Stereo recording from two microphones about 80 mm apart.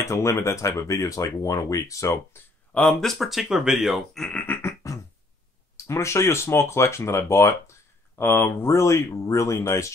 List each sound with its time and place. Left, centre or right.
0.0 s speech: left
2.3 s speech: left
2.7 s speech: centre
4.4 s a sound: left
5.9 s speech: left